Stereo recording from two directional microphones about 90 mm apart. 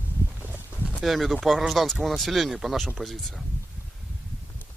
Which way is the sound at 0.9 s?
Centre (ahead or behind).